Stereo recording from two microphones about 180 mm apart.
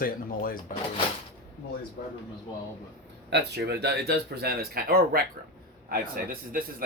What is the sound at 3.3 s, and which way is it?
A man's voice, 70° right (ahead or behind).